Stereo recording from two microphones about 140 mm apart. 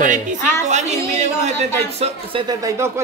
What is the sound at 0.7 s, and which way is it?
A woman's voice, 55° right (ahead or behind).